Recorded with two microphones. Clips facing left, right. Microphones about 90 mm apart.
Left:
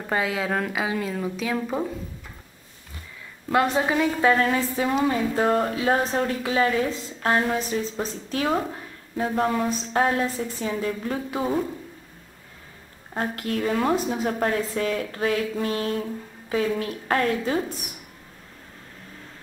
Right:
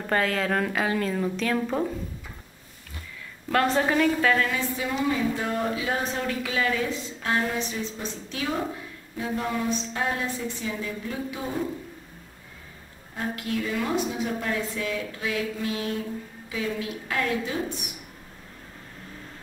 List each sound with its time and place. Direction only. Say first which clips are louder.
0.0 s a woman's voice: even; 10° left (ahead or behind)
3.6 s a woman's voice: even; 10° left (ahead or behind)
4.2 s a woman's voice: left 4 dB; 30° left (ahead or behind)
13.1 s a woman's voice: left 3 dB; 45° left (ahead or behind)